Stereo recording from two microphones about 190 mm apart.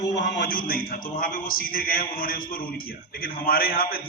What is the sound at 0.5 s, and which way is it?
A man's voice, 50° left (ahead or behind).